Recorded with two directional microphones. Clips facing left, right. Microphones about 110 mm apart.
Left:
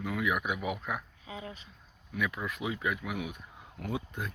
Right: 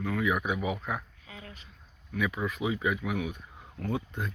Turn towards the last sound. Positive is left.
turn(degrees=0)  # may be behind; listen again after turning